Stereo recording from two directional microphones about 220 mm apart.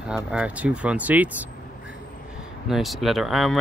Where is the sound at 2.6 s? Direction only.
Centre (ahead or behind).